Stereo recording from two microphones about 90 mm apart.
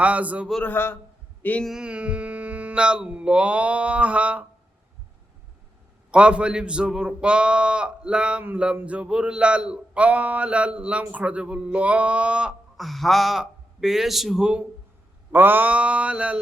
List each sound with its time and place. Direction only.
0.0 s a man's voice: 15° right (ahead or behind)
0.6 s a man's voice: 25° left (ahead or behind)
1.6 s a man's voice: 10° right (ahead or behind)
6.1 s a man's voice: 10° right (ahead or behind)
12.7 s a man's voice: centre (ahead or behind)
15.3 s a man's voice: 20° right (ahead or behind)